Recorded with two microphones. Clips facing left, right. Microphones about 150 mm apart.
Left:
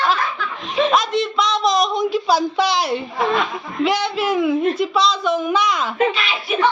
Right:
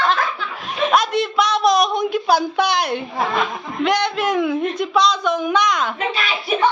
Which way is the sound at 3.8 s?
5° left (ahead or behind).